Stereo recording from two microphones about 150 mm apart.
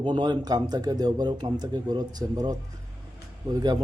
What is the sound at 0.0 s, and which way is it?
Speech, 30° right (ahead or behind).